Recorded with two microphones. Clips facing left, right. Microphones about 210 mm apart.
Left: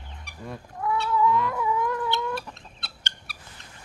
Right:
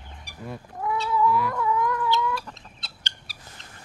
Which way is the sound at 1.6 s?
20° left (ahead or behind).